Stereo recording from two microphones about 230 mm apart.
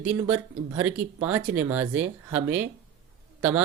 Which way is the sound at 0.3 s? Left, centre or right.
Right.